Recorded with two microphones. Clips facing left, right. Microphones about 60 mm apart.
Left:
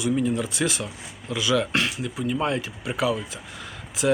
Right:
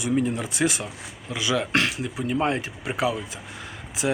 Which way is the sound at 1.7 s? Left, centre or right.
Right.